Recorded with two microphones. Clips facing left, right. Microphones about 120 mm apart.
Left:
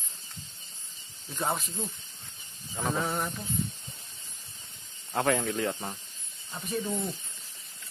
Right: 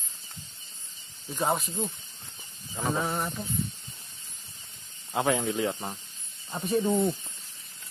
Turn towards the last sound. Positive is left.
turn(degrees=-30)  # may be behind; listen again after turning